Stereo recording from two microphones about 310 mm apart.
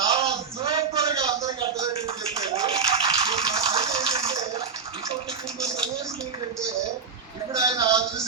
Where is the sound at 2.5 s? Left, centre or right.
Centre.